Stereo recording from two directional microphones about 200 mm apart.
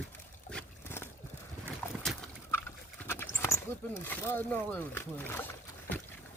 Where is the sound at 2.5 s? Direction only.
10° left (ahead or behind).